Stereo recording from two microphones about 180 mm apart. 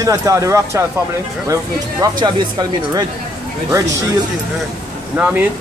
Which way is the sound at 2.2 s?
25° right (ahead or behind).